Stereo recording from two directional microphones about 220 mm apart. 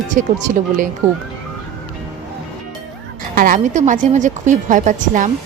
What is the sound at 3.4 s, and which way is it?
Speech, 35° right (ahead or behind).